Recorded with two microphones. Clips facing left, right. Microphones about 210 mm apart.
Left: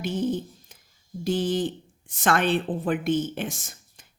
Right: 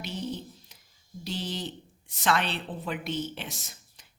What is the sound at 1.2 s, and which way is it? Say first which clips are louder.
Speech: left 10 dB; 50° left (ahead or behind).